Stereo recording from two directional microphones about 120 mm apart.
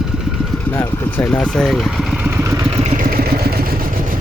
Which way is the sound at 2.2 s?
20° right (ahead or behind).